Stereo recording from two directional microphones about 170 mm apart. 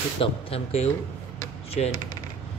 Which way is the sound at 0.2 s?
35° left (ahead or behind).